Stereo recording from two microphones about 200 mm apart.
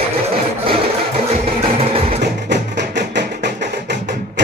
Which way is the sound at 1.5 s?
30° right (ahead or behind).